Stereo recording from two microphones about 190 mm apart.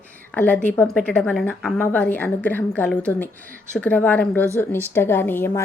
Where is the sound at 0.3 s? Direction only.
5° left (ahead or behind).